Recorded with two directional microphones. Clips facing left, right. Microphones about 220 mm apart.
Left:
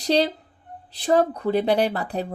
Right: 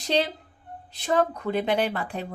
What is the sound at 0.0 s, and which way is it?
Speech, 35° left (ahead or behind).